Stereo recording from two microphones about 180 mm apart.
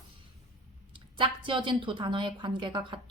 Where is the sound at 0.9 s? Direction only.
25° right (ahead or behind).